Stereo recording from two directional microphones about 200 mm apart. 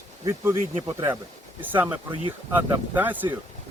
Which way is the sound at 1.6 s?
10° right (ahead or behind).